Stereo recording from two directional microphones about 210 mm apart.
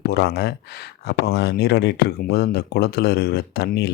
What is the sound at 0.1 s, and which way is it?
A man's voice, 50° left (ahead or behind).